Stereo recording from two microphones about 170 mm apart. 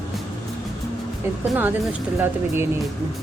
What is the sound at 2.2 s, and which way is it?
Speech, 15° right (ahead or behind).